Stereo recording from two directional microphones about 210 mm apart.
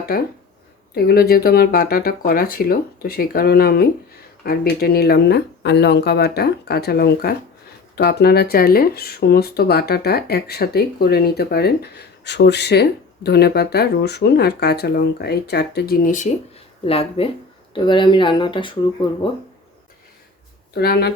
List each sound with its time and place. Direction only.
0.9 s speech: 45° left (ahead or behind)
16.8 s speech: 25° left (ahead or behind)
20.7 s speech: 50° left (ahead or behind)